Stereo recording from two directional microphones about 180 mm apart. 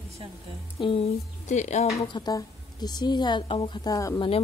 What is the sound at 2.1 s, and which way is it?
Speech, 20° left (ahead or behind).